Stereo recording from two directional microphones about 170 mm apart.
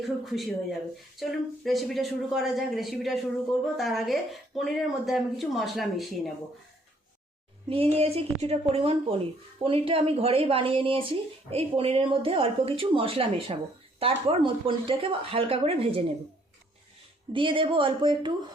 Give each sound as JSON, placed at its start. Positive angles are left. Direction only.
{"t": 0.0, "sound": "speech", "side_deg": 0}
{"t": 7.7, "sound": "a woman's voice", "side_deg": -35}
{"t": 17.3, "sound": "speech", "side_deg": -30}